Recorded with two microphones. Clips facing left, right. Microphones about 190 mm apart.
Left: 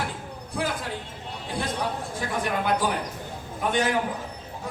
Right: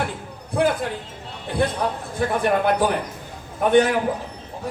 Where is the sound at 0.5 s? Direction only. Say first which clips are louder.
Right 9 dB; 60° right (ahead or behind).